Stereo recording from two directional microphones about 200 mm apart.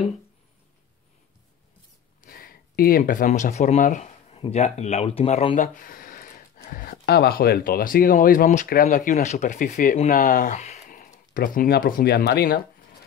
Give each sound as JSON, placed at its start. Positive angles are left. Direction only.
{"t": 2.2, "sound": "speech", "side_deg": 45}
{"t": 5.8, "sound": "speech", "side_deg": 45}